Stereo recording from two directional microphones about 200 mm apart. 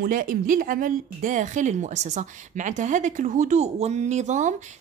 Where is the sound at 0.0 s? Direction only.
45° right (ahead or behind).